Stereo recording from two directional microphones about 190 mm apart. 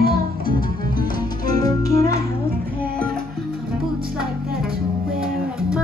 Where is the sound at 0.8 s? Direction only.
25° left (ahead or behind).